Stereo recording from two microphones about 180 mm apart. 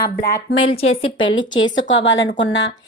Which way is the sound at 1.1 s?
90° left.